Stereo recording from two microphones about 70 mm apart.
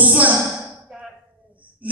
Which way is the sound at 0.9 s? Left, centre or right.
Centre.